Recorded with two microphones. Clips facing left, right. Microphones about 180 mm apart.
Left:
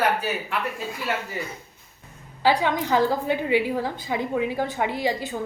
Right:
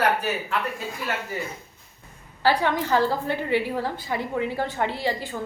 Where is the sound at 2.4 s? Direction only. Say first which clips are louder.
Left 1 dB; 15° left (ahead or behind).